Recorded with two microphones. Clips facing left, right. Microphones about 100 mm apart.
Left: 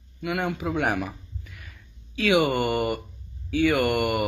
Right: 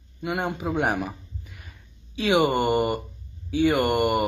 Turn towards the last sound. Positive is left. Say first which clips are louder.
# right 1 dB
turn(degrees=-25)  # may be behind; listen again after turning